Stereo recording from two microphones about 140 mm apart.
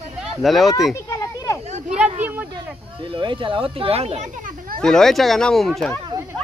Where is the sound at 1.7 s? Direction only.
55° right (ahead or behind).